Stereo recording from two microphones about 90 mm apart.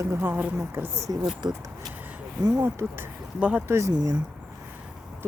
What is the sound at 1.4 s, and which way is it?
Speech, 55° right (ahead or behind).